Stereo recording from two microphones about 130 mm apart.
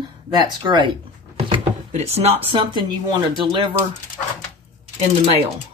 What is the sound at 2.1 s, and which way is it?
Speech, 50° right (ahead or behind).